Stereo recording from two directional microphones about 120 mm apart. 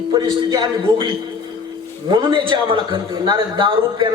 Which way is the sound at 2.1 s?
40° right (ahead or behind).